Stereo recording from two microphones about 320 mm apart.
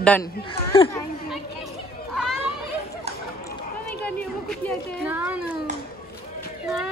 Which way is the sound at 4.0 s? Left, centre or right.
Centre.